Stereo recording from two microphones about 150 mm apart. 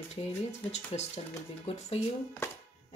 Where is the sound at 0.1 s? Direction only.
45° left (ahead or behind).